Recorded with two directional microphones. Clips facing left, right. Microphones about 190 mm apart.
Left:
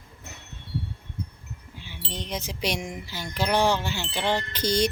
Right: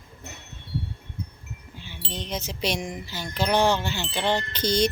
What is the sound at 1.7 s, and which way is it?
Wind chime, 10° left (ahead or behind).